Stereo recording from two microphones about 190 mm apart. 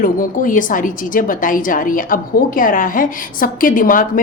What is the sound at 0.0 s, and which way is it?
A woman's voice, 45° left (ahead or behind).